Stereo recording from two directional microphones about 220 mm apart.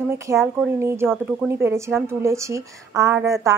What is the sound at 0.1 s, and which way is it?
Speech, 10° right (ahead or behind).